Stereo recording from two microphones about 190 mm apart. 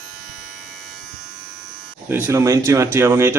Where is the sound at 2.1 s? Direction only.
15° right (ahead or behind).